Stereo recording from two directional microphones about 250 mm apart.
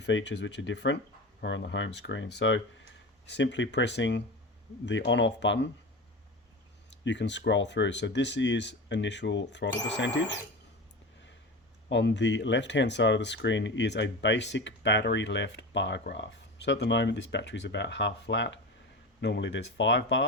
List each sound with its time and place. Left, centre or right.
0.0 s speech: left
7.0 s speech: left
11.9 s speech: left